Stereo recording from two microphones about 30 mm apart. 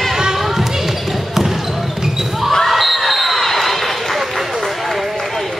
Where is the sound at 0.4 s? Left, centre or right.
Centre.